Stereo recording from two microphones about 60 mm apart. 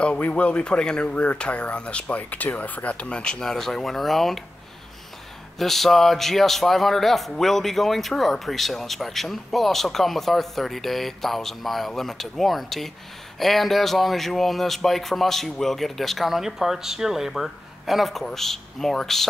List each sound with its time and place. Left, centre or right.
0.0 s speech: centre
5.6 s speech: centre